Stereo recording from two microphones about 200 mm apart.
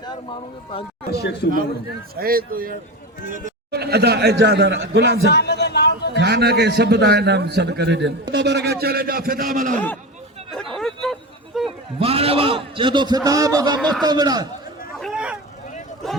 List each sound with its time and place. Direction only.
1.1 s speech: 55° left (ahead or behind)
2.1 s a man's voice: 45° right (ahead or behind)
5.3 s a sound: 55° left (ahead or behind)
6.1 s a man's voice: 55° right (ahead or behind)
9.7 s speech: 10° left (ahead or behind)
10.5 s bow-wow: centre (ahead or behind)
11.9 s a man's voice: 30° right (ahead or behind)
14.9 s a sound: centre (ahead or behind)